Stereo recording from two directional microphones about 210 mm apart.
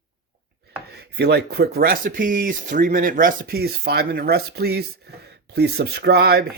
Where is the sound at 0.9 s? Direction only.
50° right (ahead or behind).